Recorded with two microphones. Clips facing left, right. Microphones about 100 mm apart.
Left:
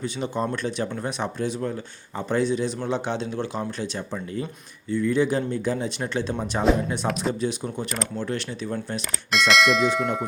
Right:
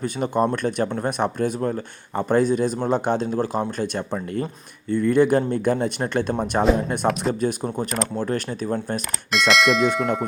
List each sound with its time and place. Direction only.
0.0 s speech: 50° right (ahead or behind)
7.1 s speech: centre (ahead or behind)
7.4 s speech: 45° right (ahead or behind)
9.3 s speech: centre (ahead or behind)